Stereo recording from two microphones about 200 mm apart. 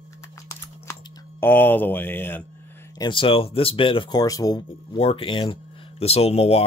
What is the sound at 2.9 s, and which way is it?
Speech, 20° left (ahead or behind).